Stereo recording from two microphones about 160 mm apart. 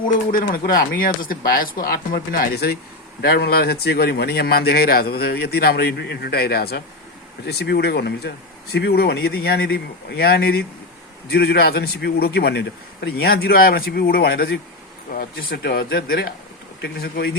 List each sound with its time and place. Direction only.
0.3 s speech: 60° left (ahead or behind)
3.2 s a man's voice: 90° left
7.4 s a man's voice: 90° left
15.1 s a man's voice: 65° left (ahead or behind)